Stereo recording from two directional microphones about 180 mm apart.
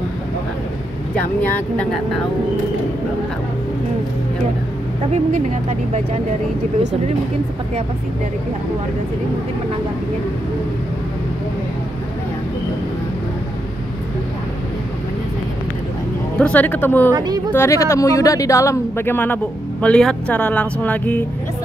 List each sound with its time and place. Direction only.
1.1 s speech: 5° left (ahead or behind)
5.1 s speech: 40° right (ahead or behind)
16.3 s speech: 10° left (ahead or behind)
17.1 s speech: 25° right (ahead or behind)
17.5 s speech: 15° left (ahead or behind)